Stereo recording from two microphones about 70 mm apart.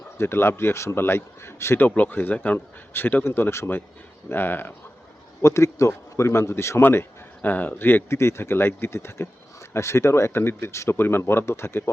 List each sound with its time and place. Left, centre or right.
0.2 s speech: left
2.0 s speech: left
5.4 s a man's voice: left